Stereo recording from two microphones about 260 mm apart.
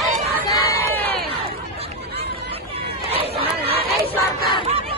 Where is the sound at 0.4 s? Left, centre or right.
Centre.